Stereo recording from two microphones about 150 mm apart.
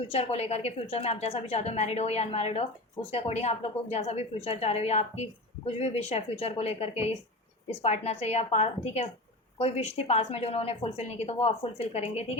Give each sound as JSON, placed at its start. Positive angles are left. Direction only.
{"t": 0.1, "sound": "a woman's voice", "side_deg": 45}